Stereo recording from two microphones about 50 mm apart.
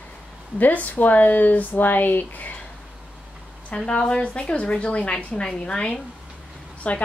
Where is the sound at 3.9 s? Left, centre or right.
Centre.